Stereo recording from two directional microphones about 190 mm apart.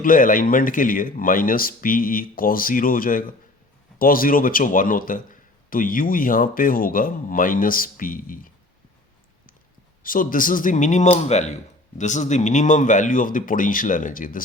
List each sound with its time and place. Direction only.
0.0 s speech: 45° left (ahead or behind)
10.0 s speech: 45° left (ahead or behind)